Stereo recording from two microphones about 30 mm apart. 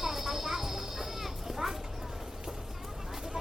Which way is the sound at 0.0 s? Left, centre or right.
Centre.